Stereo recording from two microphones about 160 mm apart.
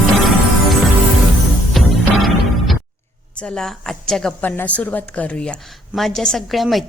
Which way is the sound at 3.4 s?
5° left (ahead or behind).